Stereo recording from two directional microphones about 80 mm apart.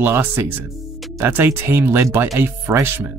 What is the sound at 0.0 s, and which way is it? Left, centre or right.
Speech, right.